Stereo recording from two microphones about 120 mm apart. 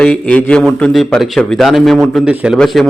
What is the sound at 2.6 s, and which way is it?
Speech, 5° left (ahead or behind).